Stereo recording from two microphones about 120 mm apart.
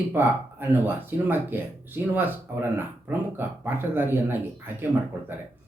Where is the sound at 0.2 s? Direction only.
20° right (ahead or behind).